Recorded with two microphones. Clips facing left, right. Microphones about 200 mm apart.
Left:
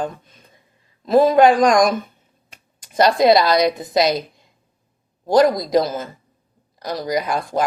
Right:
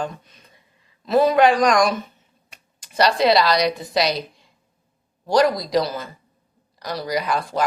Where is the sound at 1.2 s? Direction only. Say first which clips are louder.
Left 2 dB; 50° left (ahead or behind).